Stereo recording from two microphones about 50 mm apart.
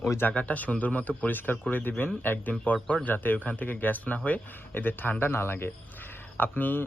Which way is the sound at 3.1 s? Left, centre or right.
Left.